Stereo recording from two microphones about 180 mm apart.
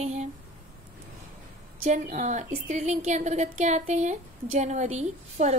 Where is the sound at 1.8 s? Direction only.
40° right (ahead or behind).